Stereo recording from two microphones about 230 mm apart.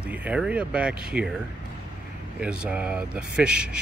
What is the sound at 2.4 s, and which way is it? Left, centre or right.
Speech, centre.